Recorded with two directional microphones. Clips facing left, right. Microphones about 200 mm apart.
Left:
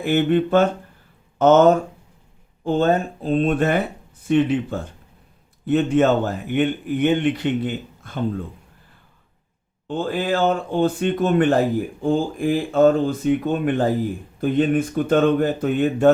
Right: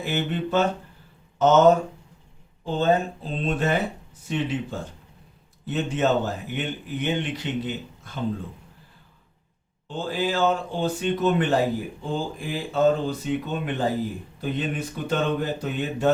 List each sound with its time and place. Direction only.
0.0 s a man's voice: 55° left (ahead or behind)
9.8 s a man's voice: 55° left (ahead or behind)